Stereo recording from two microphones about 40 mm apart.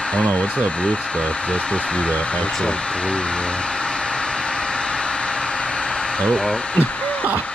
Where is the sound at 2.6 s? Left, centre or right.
Left.